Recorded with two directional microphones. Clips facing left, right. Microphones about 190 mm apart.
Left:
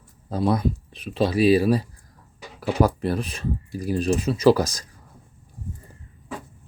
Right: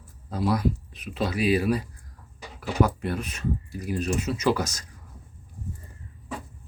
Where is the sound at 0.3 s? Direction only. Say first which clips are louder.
Left 3 dB; 30° left (ahead or behind).